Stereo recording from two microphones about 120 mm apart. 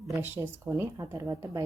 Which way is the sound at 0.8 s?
25° right (ahead or behind).